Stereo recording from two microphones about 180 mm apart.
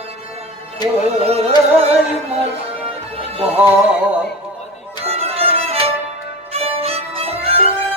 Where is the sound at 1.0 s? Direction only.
35° right (ahead or behind).